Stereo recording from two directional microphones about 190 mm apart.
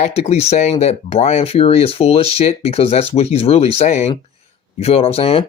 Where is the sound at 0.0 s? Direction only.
35° left (ahead or behind).